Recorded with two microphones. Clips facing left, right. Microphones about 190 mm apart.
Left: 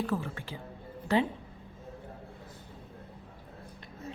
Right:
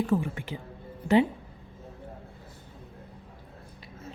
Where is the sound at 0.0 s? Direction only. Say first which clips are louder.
Right 6 dB; 15° right (ahead or behind).